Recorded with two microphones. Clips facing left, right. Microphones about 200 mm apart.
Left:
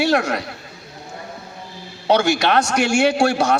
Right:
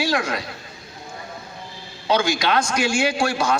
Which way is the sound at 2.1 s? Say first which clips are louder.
Left 4 dB; 70° left (ahead or behind).